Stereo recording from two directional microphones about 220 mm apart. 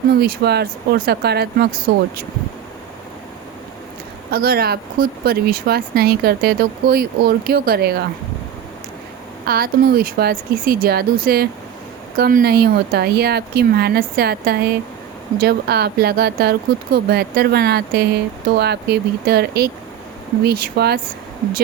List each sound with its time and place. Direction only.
0.2 s speech: 45° right (ahead or behind)
4.3 s speech: 45° right (ahead or behind)
9.5 s speech: 45° right (ahead or behind)